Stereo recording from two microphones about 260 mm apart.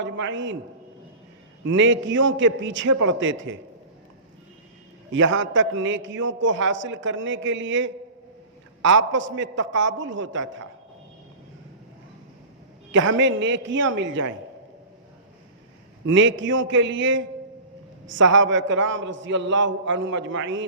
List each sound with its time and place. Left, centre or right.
0.0 s a man's voice: right
1.6 s a man's voice: right
5.1 s a man's voice: right
12.9 s a man's voice: right
16.0 s a man's voice: right